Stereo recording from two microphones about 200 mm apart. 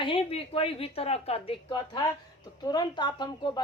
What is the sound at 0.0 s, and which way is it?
Speech, 25° left (ahead or behind).